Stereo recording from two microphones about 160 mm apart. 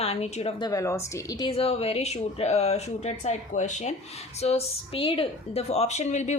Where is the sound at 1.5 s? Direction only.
40° left (ahead or behind).